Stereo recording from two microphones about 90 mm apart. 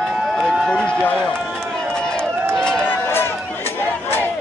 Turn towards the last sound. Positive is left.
turn(degrees=25)  # may be behind; listen again after turning